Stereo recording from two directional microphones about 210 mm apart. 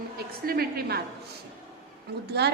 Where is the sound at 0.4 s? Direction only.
45° right (ahead or behind).